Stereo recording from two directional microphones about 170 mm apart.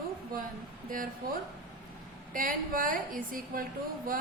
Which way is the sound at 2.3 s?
55° right (ahead or behind).